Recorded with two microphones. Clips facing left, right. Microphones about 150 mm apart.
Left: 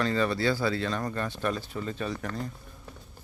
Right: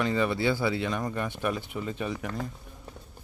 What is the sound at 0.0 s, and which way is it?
Speech, 15° right (ahead or behind).